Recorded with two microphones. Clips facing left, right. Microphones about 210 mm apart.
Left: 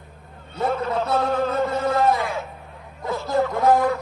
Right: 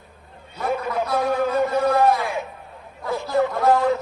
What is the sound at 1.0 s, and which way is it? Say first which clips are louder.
Speech: even; 25° left (ahead or behind).